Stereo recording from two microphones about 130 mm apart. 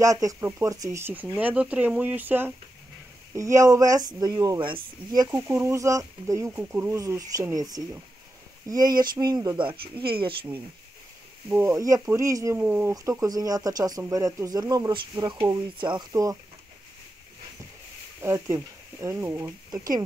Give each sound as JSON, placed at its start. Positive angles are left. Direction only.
{"t": 0.0, "sound": "speech", "side_deg": -25}
{"t": 5.5, "sound": "speech", "side_deg": -20}
{"t": 9.6, "sound": "speech", "side_deg": -40}
{"t": 11.4, "sound": "speech", "side_deg": -20}
{"t": 18.2, "sound": "speech", "side_deg": -25}